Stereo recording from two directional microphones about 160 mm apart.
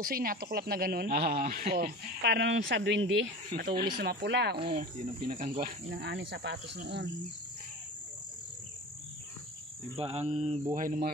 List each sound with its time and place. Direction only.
0.0 s speech: 65° right (ahead or behind); by 4.6 s 90° right
4.6 s speech: 35° right (ahead or behind)
5.6 s speech: 90° right
9.9 s mantra: 40° right (ahead or behind); by 11.1 s 55° right (ahead or behind)